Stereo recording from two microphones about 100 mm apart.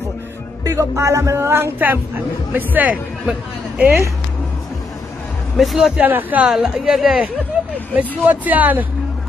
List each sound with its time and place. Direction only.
0.7 s speech: 30° right (ahead or behind); by 3.8 s 15° right (ahead or behind)
5.6 s a woman's voice: 5° right (ahead or behind)
6.0 s speech: 15° right (ahead or behind)
6.5 s a woman's voice: 5° right (ahead or behind)
7.5 s a sound: 15° right (ahead or behind)
8.3 s speech: 15° right (ahead or behind)